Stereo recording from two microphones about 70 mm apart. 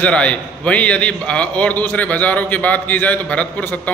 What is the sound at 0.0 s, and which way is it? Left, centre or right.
A man's voice, centre.